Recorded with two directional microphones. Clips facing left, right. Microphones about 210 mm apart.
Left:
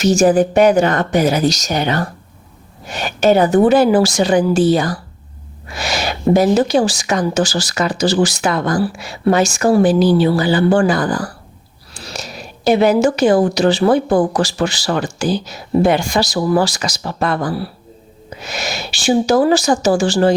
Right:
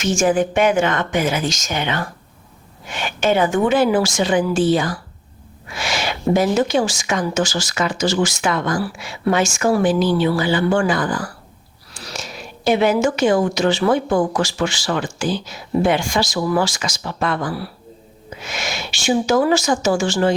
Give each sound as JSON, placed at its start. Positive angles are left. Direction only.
{"t": 0.0, "sound": "speech", "side_deg": 40}